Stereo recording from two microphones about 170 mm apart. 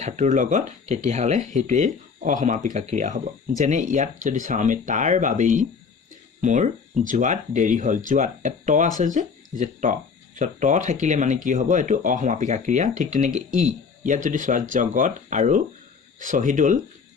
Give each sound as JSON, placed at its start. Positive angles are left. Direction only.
{"t": 0.0, "sound": "speech", "side_deg": -45}